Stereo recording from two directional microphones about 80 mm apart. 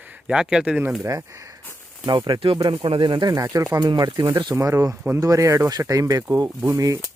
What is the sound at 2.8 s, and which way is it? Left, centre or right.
Speech, right.